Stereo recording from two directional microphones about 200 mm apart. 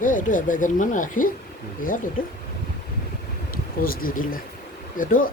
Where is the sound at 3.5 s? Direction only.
45° left (ahead or behind).